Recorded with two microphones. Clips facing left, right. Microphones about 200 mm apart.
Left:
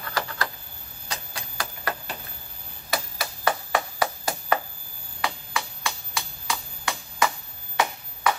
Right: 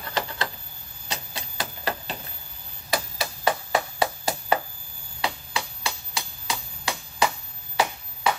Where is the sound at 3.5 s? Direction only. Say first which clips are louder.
Right 1 dB; 25° right (ahead or behind).